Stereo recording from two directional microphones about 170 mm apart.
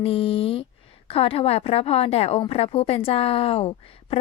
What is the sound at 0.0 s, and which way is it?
A woman's voice, 35° left (ahead or behind).